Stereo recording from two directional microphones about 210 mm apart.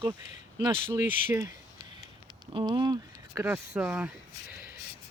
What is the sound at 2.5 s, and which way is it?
Speech, 25° right (ahead or behind).